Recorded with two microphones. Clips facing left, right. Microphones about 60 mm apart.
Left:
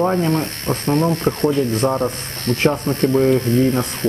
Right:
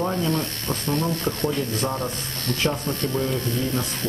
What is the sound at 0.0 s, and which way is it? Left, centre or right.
Speech, left.